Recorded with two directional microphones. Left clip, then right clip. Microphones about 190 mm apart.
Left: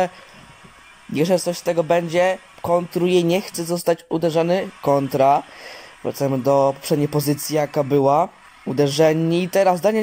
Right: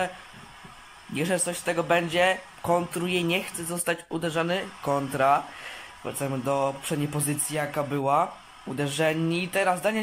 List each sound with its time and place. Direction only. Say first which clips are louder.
1.1 s speech: left 8 dB; 25° left (ahead or behind)